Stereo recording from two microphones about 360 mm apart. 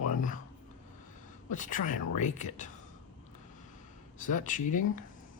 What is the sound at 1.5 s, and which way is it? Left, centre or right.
A man's voice, left.